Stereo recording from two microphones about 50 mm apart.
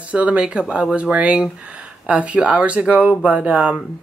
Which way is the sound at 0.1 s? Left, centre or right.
Right.